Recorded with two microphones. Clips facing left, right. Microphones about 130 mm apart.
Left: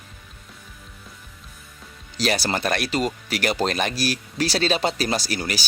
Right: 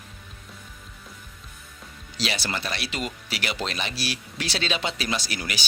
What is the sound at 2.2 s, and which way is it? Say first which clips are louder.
Speech: left 7 dB; 45° left (ahead or behind).